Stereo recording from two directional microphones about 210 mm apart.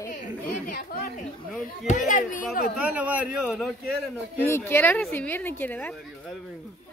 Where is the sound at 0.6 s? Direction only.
40° left (ahead or behind).